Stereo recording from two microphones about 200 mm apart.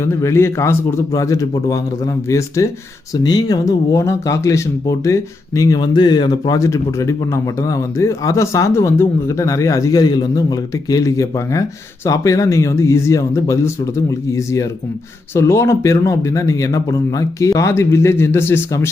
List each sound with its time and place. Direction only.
0.0 s speech: 15° left (ahead or behind)